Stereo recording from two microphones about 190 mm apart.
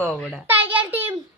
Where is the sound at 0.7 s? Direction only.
10° right (ahead or behind).